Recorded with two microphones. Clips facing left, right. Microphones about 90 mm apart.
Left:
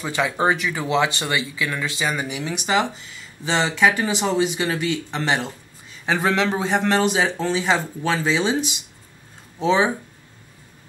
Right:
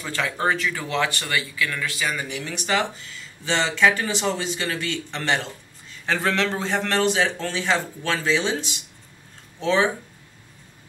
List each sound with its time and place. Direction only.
0.0 s speech: 15° left (ahead or behind)